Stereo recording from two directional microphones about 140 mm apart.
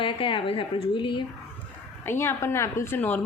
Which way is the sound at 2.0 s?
15° left (ahead or behind).